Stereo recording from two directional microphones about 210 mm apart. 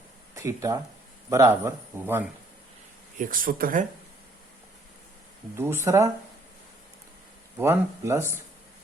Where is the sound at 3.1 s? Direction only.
40° right (ahead or behind).